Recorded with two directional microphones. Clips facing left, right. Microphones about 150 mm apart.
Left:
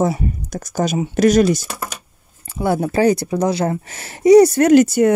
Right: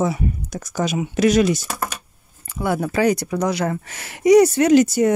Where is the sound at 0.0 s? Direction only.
40° left (ahead or behind).